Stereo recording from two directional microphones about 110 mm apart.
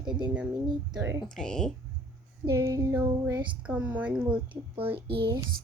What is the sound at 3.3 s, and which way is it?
Speech, 45° right (ahead or behind).